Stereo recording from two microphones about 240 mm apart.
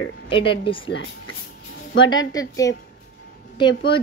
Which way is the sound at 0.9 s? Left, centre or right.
Left.